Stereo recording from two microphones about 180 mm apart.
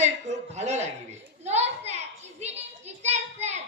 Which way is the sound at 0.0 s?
40° right (ahead or behind).